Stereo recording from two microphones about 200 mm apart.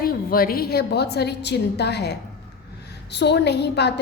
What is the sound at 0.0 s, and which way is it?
A woman's voice, 50° left (ahead or behind).